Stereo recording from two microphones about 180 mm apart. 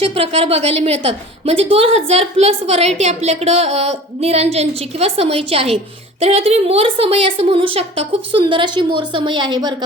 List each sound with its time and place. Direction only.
0.0 s a woman's voice: 30° right (ahead or behind)